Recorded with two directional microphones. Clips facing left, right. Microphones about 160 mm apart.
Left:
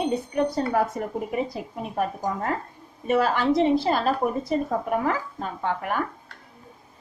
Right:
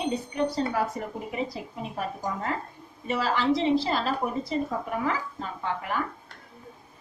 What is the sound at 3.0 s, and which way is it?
A woman's voice, 50° left (ahead or behind).